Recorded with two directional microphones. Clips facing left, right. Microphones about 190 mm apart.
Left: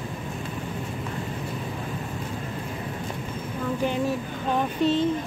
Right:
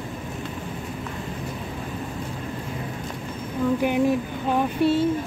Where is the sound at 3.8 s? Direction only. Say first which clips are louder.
Right 2 dB; 15° right (ahead or behind).